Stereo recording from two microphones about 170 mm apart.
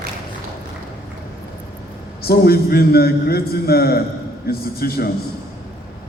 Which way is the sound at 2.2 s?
65° left (ahead or behind).